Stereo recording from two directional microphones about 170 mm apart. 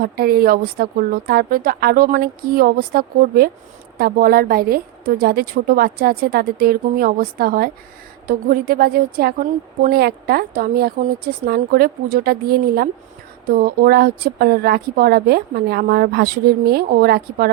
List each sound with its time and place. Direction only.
0.0 s a woman's voice: 60° right (ahead or behind)